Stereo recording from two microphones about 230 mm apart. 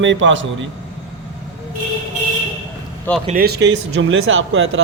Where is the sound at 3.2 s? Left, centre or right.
Right.